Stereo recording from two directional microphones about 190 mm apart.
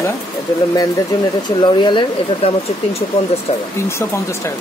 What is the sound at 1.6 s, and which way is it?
Speech, 25° left (ahead or behind).